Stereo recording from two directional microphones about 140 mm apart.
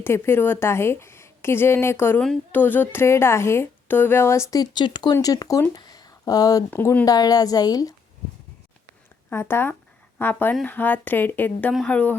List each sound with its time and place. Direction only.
0.0 s a woman's voice: 15° left (ahead or behind)
4.5 s speech: 30° left (ahead or behind)
6.7 s a woman's voice: 10° left (ahead or behind)
7.0 s a woman's voice: 25° left (ahead or behind)
9.3 s a woman's voice: 15° left (ahead or behind)